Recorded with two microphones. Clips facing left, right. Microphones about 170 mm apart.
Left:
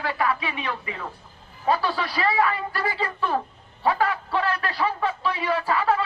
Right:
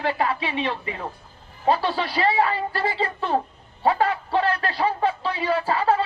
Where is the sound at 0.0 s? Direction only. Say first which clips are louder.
Right 2 dB; 30° right (ahead or behind).